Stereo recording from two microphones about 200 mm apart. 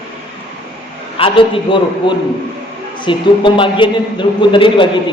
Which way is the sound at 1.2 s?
25° left (ahead or behind).